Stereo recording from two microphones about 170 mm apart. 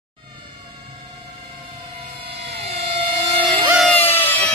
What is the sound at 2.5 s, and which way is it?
Vehicle, 35° right (ahead or behind).